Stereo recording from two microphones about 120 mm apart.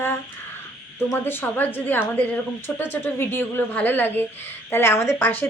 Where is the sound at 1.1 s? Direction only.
15° left (ahead or behind).